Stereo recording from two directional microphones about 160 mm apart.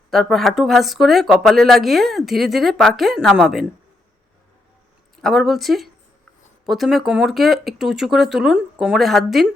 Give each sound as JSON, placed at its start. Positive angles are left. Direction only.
{"t": 0.1, "sound": "speech", "side_deg": 0}
{"t": 5.1, "sound": "speech", "side_deg": 0}